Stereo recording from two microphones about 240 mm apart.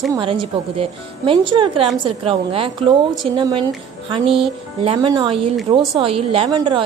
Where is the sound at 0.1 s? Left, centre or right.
Right.